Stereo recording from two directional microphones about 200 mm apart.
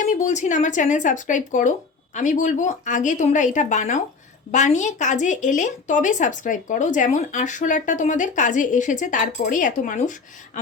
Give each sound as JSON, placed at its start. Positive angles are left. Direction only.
{"t": 0.0, "sound": "speech", "side_deg": 35}